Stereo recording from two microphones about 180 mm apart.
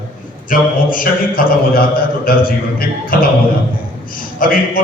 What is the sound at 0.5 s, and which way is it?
Speech, 50° left (ahead or behind).